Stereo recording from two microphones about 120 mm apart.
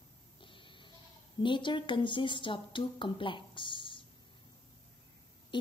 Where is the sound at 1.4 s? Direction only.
40° left (ahead or behind).